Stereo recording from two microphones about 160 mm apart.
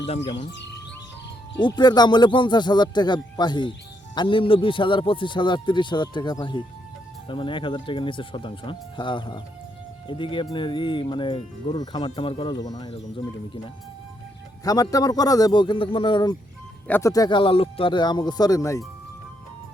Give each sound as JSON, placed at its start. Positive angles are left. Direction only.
{"t": 1.5, "sound": "speech", "side_deg": 30}
{"t": 14.6, "sound": "speech", "side_deg": 20}